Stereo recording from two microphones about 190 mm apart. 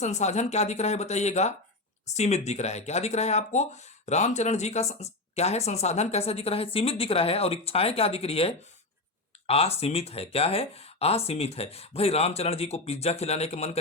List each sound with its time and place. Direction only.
0.0 s speech: 35° left (ahead or behind)